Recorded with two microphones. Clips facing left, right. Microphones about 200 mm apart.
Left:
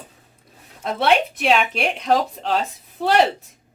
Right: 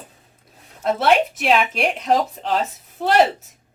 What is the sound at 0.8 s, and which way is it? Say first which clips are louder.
Speech: right 2 dB; centre (ahead or behind).